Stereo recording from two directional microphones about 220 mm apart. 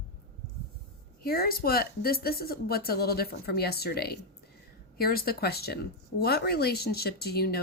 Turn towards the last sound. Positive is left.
turn(degrees=45)  # may be behind; listen again after turning